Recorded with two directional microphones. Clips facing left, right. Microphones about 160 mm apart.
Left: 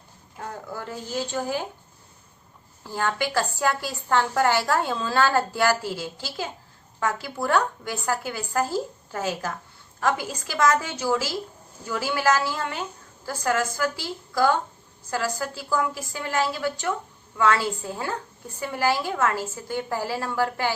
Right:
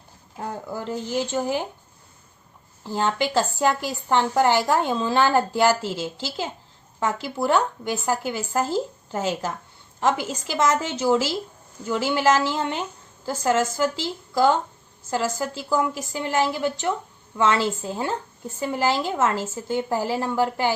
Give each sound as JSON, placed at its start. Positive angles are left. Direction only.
{"t": 0.3, "sound": "a woman's voice", "side_deg": -30}
{"t": 2.8, "sound": "a woman's voice", "side_deg": -20}
{"t": 16.1, "sound": "a woman's voice", "side_deg": -20}